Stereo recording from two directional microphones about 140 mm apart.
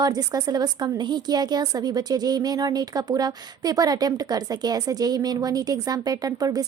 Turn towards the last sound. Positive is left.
turn(degrees=-25)  # may be behind; listen again after turning